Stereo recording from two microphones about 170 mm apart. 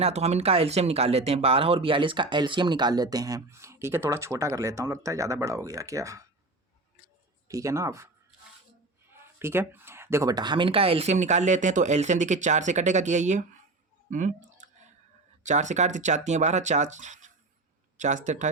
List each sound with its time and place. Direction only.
0.0 s speech: 40° right (ahead or behind); by 6.2 s 20° right (ahead or behind)
7.4 s speech: 20° right (ahead or behind)
9.1 s speech: 15° right (ahead or behind); by 13.4 s 45° right (ahead or behind)
14.1 s a sound: 45° right (ahead or behind)
15.4 s speech: 45° right (ahead or behind)